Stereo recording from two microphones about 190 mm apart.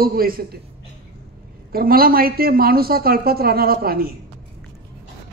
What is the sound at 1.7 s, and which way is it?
Speech, 50° right (ahead or behind).